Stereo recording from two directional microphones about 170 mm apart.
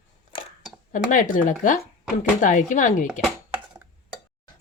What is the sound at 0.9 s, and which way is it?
Speech, 50° left (ahead or behind).